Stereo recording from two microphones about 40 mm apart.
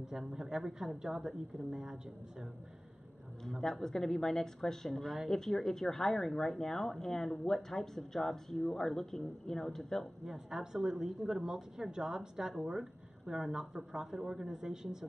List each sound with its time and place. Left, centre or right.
0.0 s speech: centre
3.6 s speech: centre
10.2 s speech: centre